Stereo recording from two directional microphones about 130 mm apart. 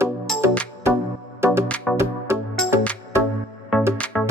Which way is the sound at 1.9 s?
5° left (ahead or behind).